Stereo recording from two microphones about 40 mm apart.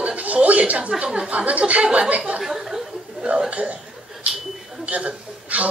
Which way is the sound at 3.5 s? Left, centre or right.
Right.